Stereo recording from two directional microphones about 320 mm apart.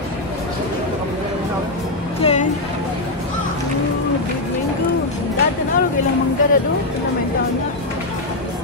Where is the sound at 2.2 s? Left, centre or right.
Centre.